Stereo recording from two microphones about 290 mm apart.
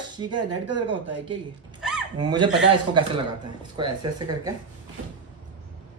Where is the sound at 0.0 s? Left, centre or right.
Centre.